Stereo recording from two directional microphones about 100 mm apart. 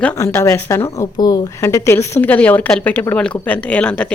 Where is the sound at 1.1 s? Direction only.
45° left (ahead or behind).